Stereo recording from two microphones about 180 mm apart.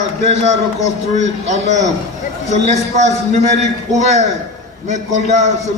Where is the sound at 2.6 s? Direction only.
40° right (ahead or behind).